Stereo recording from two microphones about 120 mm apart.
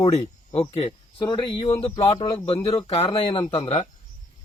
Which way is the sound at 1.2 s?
40° left (ahead or behind).